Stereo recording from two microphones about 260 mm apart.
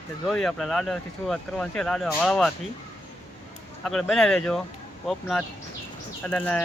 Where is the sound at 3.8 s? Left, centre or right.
Centre.